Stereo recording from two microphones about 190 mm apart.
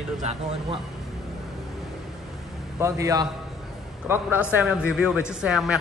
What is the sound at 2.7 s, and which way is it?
A man's voice, 15° right (ahead or behind).